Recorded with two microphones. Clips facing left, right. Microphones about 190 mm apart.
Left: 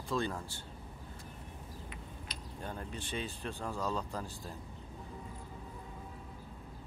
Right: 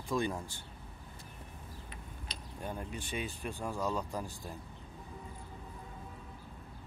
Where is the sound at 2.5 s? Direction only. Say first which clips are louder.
Right 2 dB; 10° right (ahead or behind).